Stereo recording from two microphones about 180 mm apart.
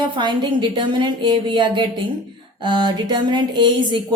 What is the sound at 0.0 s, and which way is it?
A woman's voice, 25° right (ahead or behind).